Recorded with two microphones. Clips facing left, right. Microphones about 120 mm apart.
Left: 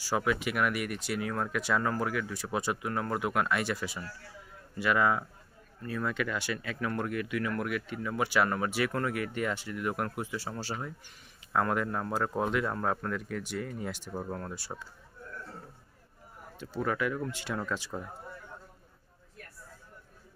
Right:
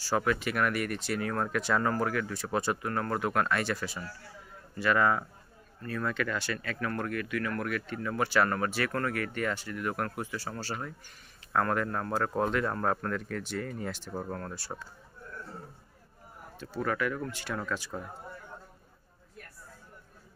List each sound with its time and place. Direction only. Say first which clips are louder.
0.0 s speech: right 1 dB; 10° left (ahead or behind)
16.5 s speech: even; 15° left (ahead or behind)
17.9 s speech: even; 10° left (ahead or behind)